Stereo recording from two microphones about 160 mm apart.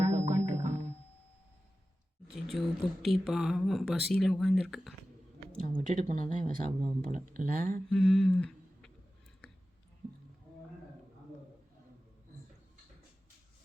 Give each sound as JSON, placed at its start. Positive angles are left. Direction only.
{"t": 0.0, "sound": "music", "side_deg": -45}
{"t": 2.3, "sound": "speech", "side_deg": 0}
{"t": 5.5, "sound": "speech", "side_deg": -55}
{"t": 7.9, "sound": "speech", "side_deg": 5}